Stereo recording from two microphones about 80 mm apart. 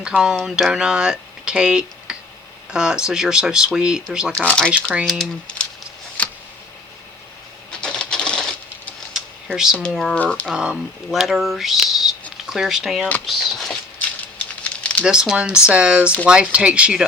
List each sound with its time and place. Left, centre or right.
0.0 s speech: centre
4.4 s speech: centre
6.2 s tick: centre
7.7 s typewriter: centre
9.9 s speech: centre
10.2 s speech: centre
10.4 s speech: centre
14.0 s a sound: centre
15.0 s speech: centre